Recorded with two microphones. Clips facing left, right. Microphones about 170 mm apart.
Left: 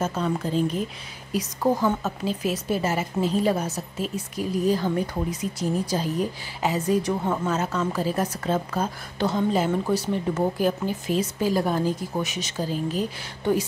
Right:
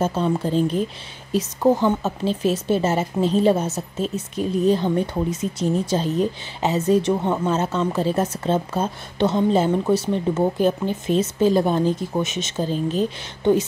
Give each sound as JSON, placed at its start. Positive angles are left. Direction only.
{"t": 0.0, "sound": "speech", "side_deg": -30}